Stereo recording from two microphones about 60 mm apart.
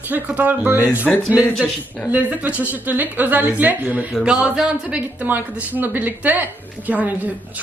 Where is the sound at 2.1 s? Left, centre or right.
Right.